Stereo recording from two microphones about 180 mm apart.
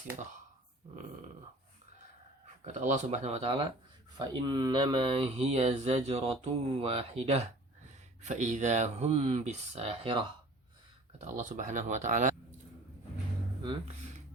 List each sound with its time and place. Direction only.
2.6 s speech: 40° right (ahead or behind)
4.2 s speech: 25° right (ahead or behind)
11.2 s speech: 40° right (ahead or behind)